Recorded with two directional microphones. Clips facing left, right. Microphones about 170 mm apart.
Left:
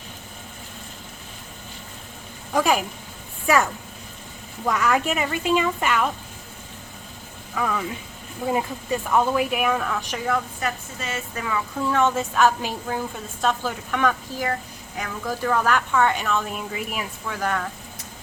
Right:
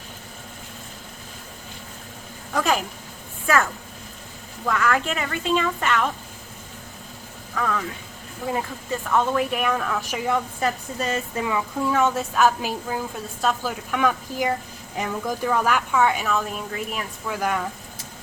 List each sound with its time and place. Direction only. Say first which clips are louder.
2.5 s speech: left 2 dB; 10° left (ahead or behind)
7.5 s speech: even; 10° left (ahead or behind)
11.0 s a woman's voice: right 5 dB; 35° right (ahead or behind)
11.4 s a woman's voice: left 1 dB; 15° right (ahead or behind); by 17.1 s 5° left (ahead or behind)
17.2 s speech: right 2 dB; 10° right (ahead or behind)